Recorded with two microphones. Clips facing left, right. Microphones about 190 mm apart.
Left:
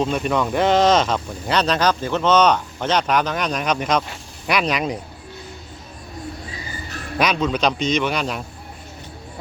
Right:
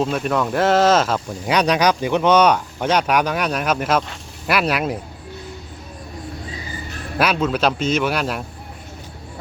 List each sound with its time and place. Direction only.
0.0 s a man's voice: centre (ahead or behind)
7.2 s a man's voice: 5° right (ahead or behind)